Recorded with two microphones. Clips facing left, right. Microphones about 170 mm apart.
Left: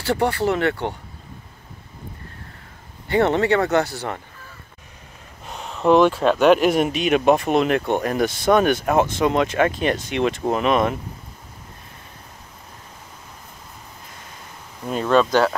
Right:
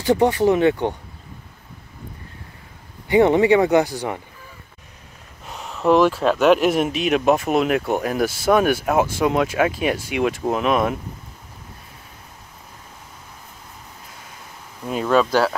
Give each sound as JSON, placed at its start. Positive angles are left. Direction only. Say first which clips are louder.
{"t": 0.0, "sound": "speech", "louder": "right 4 dB", "side_deg": -15}
{"t": 3.1, "sound": "speech", "louder": "right 4 dB", "side_deg": -15}
{"t": 5.5, "sound": "speech", "louder": "left 1 dB", "side_deg": 0}
{"t": 14.9, "sound": "speech", "louder": "even", "side_deg": -5}